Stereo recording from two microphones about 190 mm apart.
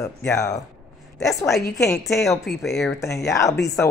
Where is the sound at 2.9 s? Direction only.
15° left (ahead or behind).